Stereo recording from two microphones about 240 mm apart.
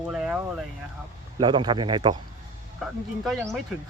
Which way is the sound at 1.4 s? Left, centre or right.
Centre.